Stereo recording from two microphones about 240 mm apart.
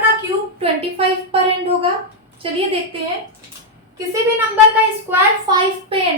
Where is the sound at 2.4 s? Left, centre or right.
Right.